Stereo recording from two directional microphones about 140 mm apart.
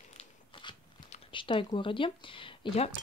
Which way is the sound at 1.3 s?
35° left (ahead or behind).